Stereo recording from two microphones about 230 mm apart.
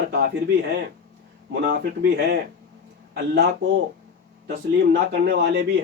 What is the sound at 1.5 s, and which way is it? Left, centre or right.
Speech, right.